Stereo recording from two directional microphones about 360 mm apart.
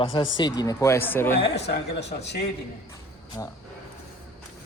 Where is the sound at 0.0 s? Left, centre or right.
Centre.